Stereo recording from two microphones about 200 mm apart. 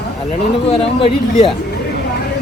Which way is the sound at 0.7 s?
30° left (ahead or behind).